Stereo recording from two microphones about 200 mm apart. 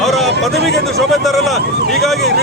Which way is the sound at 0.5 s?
55° right (ahead or behind).